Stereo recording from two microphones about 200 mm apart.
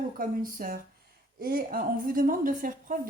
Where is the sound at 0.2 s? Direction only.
45° right (ahead or behind).